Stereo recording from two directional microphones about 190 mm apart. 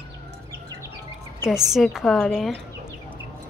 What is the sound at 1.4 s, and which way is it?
A woman's voice, centre (ahead or behind).